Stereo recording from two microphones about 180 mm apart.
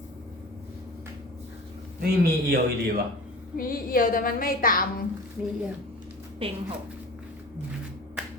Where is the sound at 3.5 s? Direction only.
55° left (ahead or behind).